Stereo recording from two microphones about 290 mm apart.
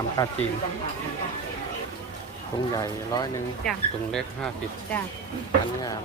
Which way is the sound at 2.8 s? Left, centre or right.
Centre.